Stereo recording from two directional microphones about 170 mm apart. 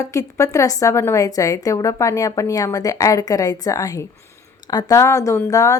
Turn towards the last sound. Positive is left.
turn(degrees=20)  # may be behind; listen again after turning